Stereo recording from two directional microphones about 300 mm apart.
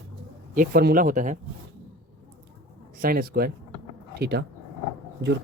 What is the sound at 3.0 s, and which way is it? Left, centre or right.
Speech, right.